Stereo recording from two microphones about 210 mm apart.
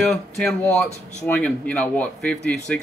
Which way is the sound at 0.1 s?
5° left (ahead or behind).